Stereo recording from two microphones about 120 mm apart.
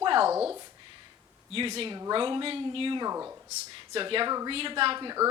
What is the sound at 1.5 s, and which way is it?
Speech, 50° right (ahead or behind).